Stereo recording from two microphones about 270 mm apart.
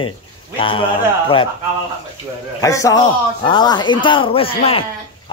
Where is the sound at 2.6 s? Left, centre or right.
Centre.